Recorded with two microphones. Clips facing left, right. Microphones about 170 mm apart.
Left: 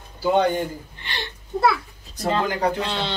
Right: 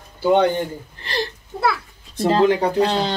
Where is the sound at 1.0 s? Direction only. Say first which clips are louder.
Right 9 dB; 35° right (ahead or behind).